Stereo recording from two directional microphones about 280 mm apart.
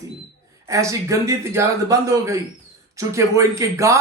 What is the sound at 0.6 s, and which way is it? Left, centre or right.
Speech, centre.